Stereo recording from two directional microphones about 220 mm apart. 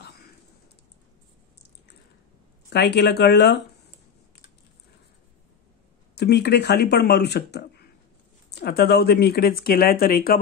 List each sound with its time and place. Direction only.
2.7 s speech: 50° left (ahead or behind)
6.1 s speech: 50° left (ahead or behind)